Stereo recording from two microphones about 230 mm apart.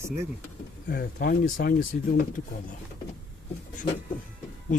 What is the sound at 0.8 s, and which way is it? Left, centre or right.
Speech, left.